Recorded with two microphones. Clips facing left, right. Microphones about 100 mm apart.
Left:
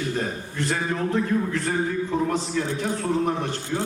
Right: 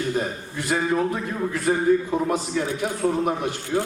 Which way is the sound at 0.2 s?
10° right (ahead or behind).